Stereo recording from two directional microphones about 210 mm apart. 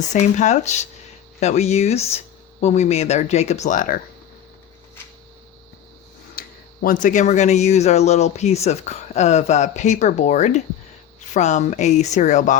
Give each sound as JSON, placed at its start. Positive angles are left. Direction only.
{"t": 0.1, "sound": "speech", "side_deg": 35}
{"t": 6.4, "sound": "a sound", "side_deg": 45}
{"t": 6.8, "sound": "speech", "side_deg": 35}